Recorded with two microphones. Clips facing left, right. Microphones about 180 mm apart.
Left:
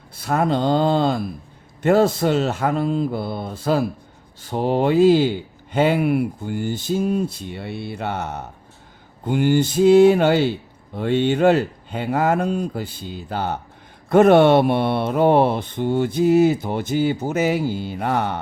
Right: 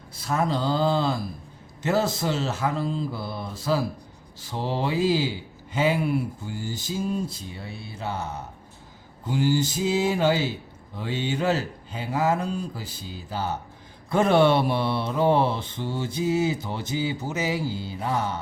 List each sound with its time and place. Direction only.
0.1 s mantra: 60° left (ahead or behind)